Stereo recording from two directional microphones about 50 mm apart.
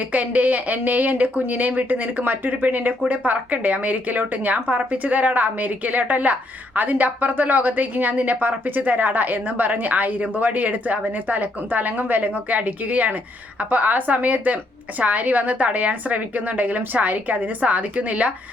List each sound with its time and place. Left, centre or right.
0.1 s a woman's voice: right